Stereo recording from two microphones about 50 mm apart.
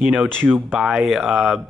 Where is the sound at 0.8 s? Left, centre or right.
Centre.